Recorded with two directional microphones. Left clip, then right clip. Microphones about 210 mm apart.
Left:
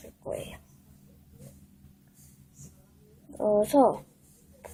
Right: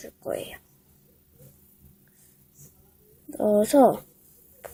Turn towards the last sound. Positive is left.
turn(degrees=-50)  # may be behind; listen again after turning